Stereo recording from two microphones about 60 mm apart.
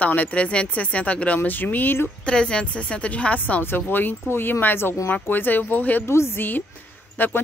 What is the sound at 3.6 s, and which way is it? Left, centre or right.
Speech, left.